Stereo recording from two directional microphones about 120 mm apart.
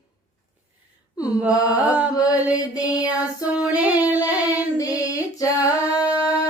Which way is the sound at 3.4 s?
10° right (ahead or behind).